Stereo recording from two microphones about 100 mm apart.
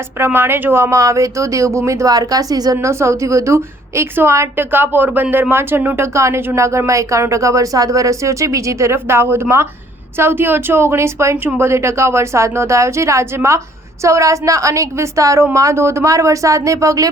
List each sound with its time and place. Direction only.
0.3 s speech: 25° right (ahead or behind); by 2.7 s 40° right (ahead or behind)
2.7 s a woman's voice: 30° right (ahead or behind)